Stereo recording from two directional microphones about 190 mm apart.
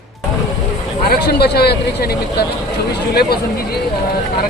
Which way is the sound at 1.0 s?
55° left (ahead or behind).